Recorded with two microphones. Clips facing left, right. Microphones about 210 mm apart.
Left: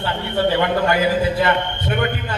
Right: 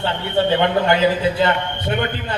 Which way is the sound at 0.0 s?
25° right (ahead or behind).